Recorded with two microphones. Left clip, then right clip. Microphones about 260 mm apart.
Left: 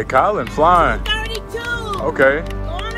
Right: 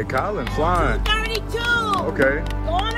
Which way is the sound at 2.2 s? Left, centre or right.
Centre.